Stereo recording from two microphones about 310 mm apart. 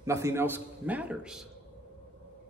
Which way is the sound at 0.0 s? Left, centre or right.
Centre.